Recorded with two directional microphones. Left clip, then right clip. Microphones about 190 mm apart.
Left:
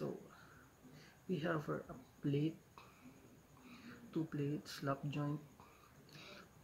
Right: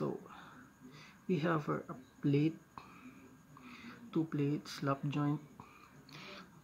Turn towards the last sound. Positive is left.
turn(degrees=-20)  # may be behind; listen again after turning